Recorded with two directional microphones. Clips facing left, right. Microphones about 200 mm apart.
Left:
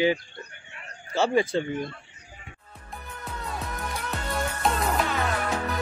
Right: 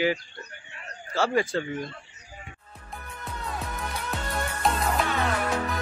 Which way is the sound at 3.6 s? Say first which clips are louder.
Even; centre (ahead or behind).